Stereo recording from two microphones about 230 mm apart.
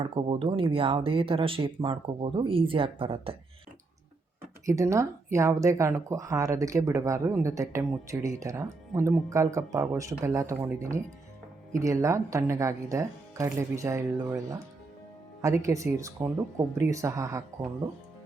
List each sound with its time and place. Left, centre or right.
0.0 s speech: right
4.6 s speech: centre